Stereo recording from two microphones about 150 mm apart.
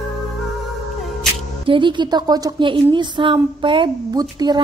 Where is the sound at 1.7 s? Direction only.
30° right (ahead or behind).